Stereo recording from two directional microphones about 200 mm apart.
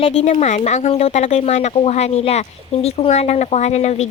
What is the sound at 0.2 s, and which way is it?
Speech, 35° left (ahead or behind).